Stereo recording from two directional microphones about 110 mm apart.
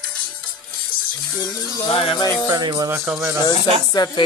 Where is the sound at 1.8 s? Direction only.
55° left (ahead or behind).